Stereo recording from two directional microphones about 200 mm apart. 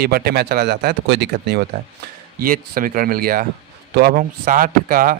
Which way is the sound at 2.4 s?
45° right (ahead or behind).